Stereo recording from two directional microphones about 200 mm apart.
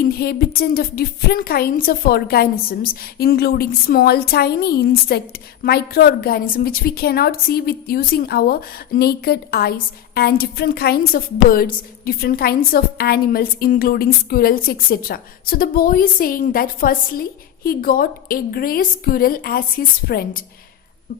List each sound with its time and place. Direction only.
0.0 s a woman's voice: 50° left (ahead or behind)